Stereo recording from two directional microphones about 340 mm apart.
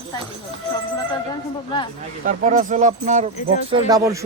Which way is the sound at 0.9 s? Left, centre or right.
Centre.